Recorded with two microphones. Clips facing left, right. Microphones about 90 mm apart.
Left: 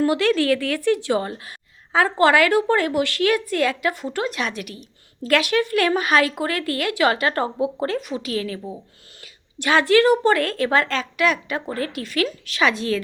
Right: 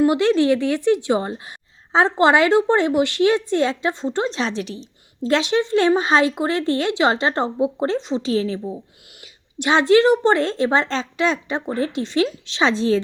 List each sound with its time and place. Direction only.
0.0 s a woman's voice: 20° right (ahead or behind)